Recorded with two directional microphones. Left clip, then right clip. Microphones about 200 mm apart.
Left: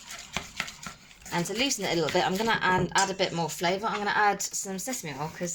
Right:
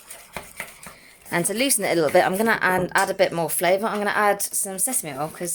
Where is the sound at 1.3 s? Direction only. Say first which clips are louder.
Right 5 dB; 50° right (ahead or behind).